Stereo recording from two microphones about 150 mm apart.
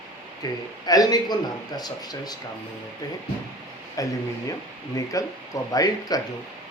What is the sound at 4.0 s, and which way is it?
A man's voice, 25° left (ahead or behind).